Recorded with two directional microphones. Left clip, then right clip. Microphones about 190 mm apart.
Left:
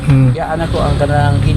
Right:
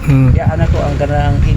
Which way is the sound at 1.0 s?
5° right (ahead or behind).